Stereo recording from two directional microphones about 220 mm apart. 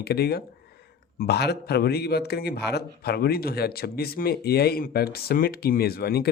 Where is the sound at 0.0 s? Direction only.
45° left (ahead or behind).